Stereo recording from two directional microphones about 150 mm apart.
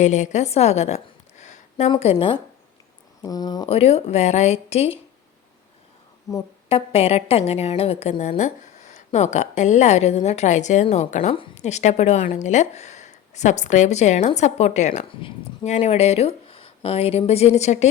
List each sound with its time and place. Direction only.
0.0 s a woman's voice: 50° left (ahead or behind)
1.9 s speech: 40° left (ahead or behind)
3.7 s a woman's voice: 45° left (ahead or behind)
6.3 s speech: 25° left (ahead or behind)
6.7 s a woman's voice: 40° left (ahead or behind)